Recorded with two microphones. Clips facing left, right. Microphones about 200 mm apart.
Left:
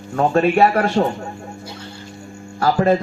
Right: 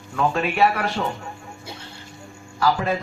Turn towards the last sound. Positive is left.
turn(degrees=45)  # may be behind; listen again after turning